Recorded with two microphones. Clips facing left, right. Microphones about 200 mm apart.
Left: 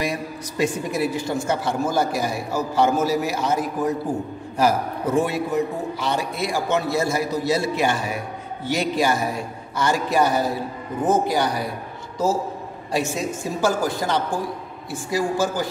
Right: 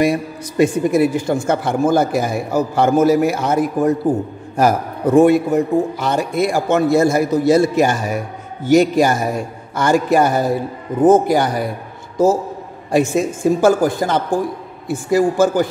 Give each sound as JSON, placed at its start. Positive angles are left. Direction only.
{"t": 0.0, "sound": "a man's voice", "side_deg": -50}
{"t": 12.9, "sound": "a man's voice", "side_deg": -50}